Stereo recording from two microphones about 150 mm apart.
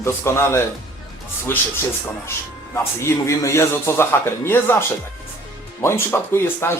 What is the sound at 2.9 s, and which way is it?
Speech, 20° left (ahead or behind).